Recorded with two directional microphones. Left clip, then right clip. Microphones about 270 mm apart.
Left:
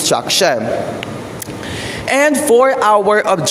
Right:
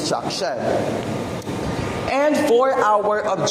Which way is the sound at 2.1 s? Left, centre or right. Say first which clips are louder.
Left 6 dB; left.